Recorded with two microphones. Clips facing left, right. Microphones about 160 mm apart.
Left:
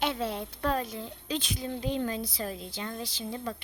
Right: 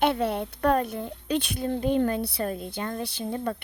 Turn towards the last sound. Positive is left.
turn(degrees=-55)  # may be behind; listen again after turning